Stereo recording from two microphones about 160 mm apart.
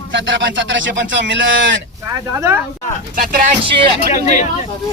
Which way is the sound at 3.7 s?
35° right (ahead or behind).